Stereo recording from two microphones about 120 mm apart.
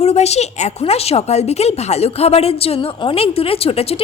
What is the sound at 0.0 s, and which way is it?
A woman's voice, 65° left (ahead or behind).